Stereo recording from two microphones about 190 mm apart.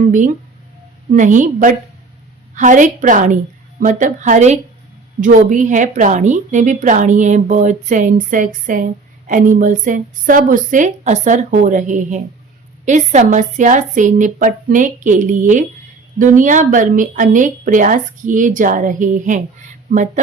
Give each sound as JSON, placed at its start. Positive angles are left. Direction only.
{"t": 1.1, "sound": "a woman's voice", "side_deg": -40}